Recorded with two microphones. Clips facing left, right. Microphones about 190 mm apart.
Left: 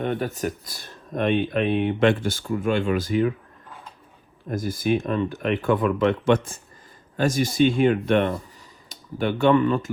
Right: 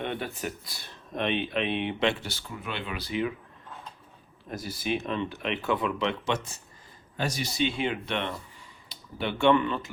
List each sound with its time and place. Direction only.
0.0 s speech: 40° left (ahead or behind)
4.4 s speech: 50° left (ahead or behind)